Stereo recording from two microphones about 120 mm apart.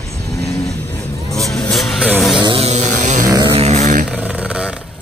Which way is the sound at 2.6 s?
70° right (ahead or behind).